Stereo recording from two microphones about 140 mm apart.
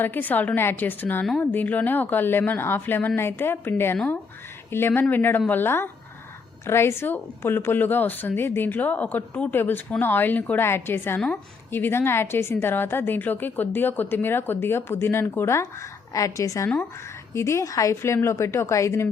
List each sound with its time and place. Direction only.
0.0 s a woman's voice: 15° left (ahead or behind)